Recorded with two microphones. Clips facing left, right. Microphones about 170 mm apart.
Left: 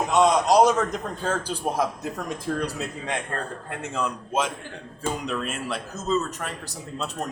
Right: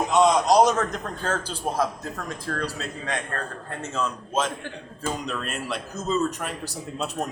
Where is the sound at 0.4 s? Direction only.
10° left (ahead or behind).